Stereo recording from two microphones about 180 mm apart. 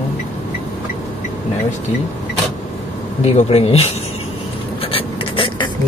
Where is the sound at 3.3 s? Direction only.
35° left (ahead or behind).